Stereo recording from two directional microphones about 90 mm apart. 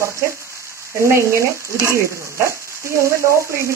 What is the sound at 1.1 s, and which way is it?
Speech, 30° right (ahead or behind).